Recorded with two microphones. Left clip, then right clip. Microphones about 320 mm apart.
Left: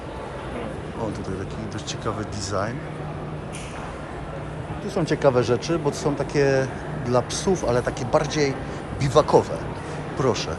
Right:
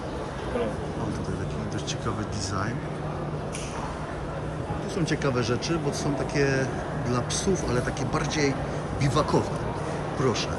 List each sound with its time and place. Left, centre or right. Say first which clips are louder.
4.9 s speech: left 8 dB; centre